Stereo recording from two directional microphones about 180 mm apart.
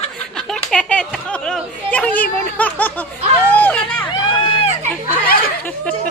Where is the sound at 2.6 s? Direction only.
10° left (ahead or behind).